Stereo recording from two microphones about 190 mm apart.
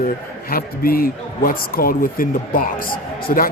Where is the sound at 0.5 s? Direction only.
50° left (ahead or behind).